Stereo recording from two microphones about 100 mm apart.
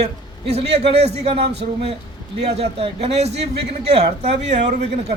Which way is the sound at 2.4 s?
90° right.